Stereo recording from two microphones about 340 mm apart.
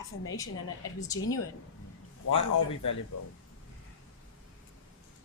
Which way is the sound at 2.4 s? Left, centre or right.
Left.